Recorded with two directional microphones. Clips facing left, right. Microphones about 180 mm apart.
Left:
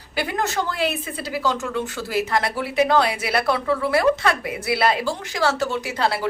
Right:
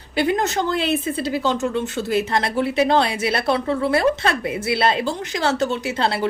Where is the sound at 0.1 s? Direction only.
25° right (ahead or behind).